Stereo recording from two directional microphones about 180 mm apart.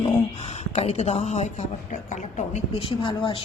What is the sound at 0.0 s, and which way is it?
Speech, 35° left (ahead or behind).